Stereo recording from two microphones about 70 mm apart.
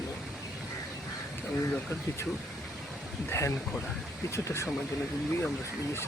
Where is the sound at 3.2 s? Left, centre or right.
Left.